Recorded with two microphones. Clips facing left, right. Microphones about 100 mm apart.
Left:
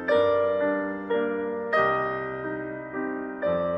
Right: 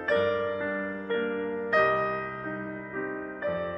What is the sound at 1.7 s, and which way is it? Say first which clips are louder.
Music: left 1 dB; 15° left (ahead or behind).